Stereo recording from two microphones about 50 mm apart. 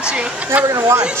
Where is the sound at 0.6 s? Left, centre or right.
Right.